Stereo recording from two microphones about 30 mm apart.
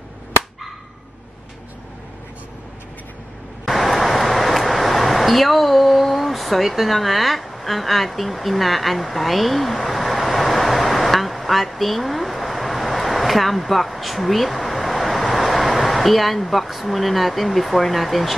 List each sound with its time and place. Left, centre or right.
3.6 s vehicle: centre